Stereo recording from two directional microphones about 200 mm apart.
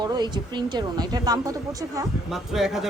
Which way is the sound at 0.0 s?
20° right (ahead or behind).